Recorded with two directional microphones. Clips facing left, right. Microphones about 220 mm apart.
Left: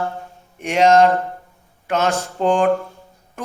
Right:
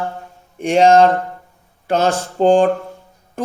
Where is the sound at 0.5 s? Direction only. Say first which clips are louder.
Right 3 dB; 30° right (ahead or behind).